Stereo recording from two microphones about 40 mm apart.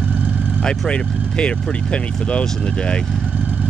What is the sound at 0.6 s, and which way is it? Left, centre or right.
Speech, left.